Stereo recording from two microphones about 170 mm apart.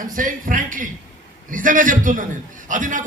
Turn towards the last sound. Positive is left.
turn(degrees=-50)  # may be behind; listen again after turning